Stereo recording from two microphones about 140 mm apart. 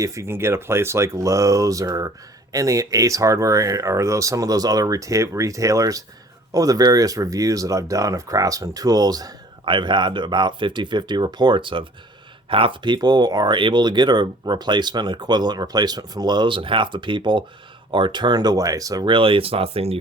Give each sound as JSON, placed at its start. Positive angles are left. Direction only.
{"t": 0.0, "sound": "speech", "side_deg": -20}